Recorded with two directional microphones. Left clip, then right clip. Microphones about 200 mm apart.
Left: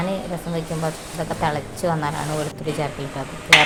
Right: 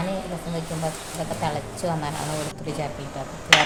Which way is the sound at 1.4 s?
10° left (ahead or behind).